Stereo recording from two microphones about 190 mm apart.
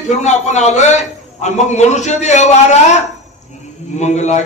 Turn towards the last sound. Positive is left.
turn(degrees=40)  # may be behind; listen again after turning